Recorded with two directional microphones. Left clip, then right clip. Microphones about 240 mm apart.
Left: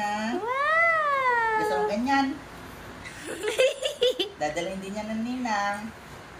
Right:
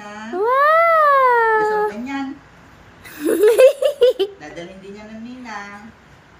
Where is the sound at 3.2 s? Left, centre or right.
Right.